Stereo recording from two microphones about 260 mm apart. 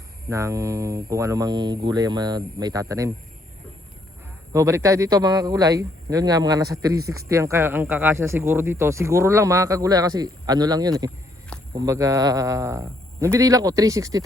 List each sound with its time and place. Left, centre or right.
0.3 s speech: centre
4.5 s speech: centre